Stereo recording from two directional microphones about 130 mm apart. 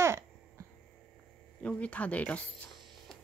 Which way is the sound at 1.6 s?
10° left (ahead or behind).